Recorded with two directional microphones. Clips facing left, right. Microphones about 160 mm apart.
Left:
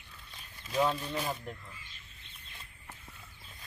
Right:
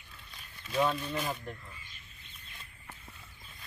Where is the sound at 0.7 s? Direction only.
10° left (ahead or behind).